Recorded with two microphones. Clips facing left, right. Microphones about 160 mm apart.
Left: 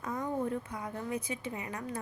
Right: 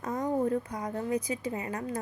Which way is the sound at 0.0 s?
45° right (ahead or behind).